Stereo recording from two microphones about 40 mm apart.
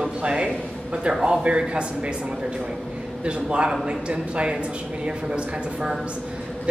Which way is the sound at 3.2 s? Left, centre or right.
Right.